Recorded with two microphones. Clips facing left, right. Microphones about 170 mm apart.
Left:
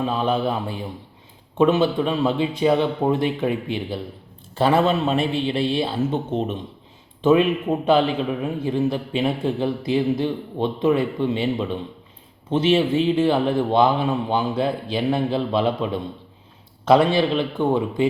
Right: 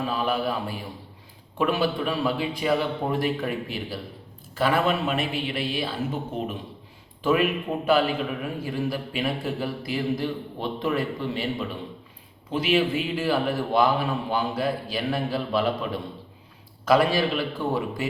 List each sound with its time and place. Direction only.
0.0 s a man's voice: 25° left (ahead or behind)